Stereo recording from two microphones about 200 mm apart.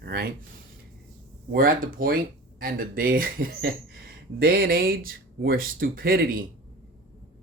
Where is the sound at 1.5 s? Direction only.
45° right (ahead or behind).